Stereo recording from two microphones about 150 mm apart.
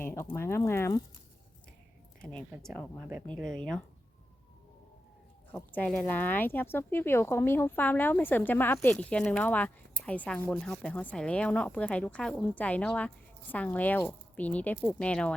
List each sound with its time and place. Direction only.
0.0 s a sound: 15° left (ahead or behind)
0.3 s speech: 15° left (ahead or behind)
2.2 s speech: 5° left (ahead or behind)
5.5 s speech: 10° left (ahead or behind)